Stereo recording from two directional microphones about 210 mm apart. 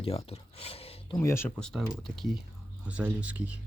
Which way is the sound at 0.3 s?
30° left (ahead or behind).